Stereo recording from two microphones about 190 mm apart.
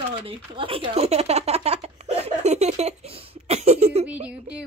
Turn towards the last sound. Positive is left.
turn(degrees=-5)  # may be behind; listen again after turning